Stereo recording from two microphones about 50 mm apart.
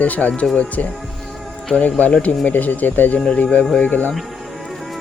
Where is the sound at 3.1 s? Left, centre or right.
Left.